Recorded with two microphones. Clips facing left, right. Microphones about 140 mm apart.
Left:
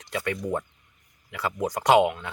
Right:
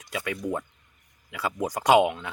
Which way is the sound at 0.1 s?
5° right (ahead or behind).